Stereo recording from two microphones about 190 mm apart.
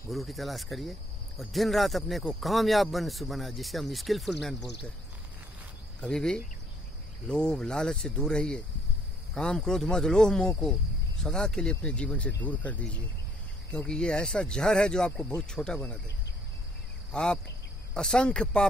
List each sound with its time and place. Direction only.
0.1 s speech: centre (ahead or behind)
5.9 s speech: 5° left (ahead or behind)
17.1 s speech: 5° left (ahead or behind)